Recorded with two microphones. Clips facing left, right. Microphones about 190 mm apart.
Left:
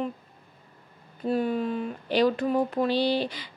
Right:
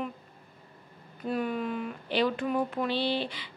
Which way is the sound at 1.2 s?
30° left (ahead or behind).